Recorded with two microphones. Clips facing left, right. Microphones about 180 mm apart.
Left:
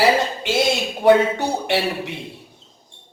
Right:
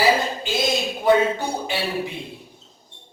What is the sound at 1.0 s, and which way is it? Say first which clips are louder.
Speech: left 4 dB; 70° left (ahead or behind).